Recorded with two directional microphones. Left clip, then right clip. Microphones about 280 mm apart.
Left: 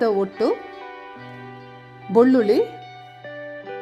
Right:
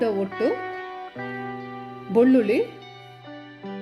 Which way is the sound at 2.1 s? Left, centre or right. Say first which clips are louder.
Left 3 dB; centre.